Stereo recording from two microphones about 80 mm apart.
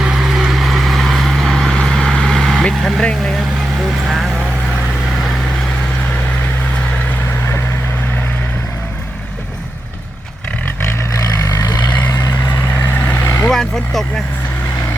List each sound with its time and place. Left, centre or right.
0.0 s vehicle: centre
2.6 s speech: centre
4.1 s vehicle: centre
11.4 s vehicle: left
11.9 s vehicle: left
12.1 s vehicle: left
12.5 s vehicle: left
13.5 s vehicle: centre